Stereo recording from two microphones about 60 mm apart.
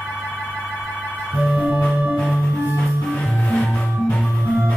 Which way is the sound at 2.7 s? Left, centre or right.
Left.